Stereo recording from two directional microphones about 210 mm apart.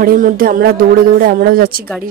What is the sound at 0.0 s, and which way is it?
Speech, 45° right (ahead or behind).